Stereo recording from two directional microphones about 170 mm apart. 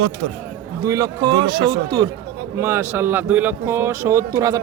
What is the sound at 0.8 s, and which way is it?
Speech, 20° right (ahead or behind).